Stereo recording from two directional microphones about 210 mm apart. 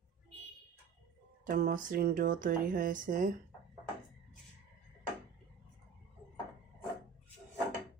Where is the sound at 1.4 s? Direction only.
40° right (ahead or behind).